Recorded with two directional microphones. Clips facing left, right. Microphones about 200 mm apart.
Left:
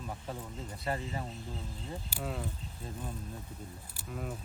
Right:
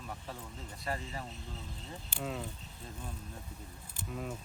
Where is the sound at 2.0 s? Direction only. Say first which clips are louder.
Right 1 dB; 5° left (ahead or behind).